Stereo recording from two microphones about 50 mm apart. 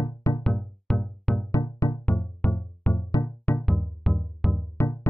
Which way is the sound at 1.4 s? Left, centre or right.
Left.